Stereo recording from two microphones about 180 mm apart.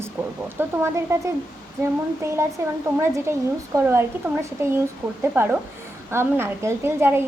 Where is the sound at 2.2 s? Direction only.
15° right (ahead or behind).